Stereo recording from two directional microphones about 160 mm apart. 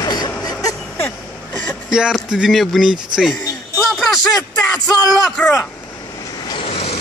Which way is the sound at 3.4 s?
20° left (ahead or behind).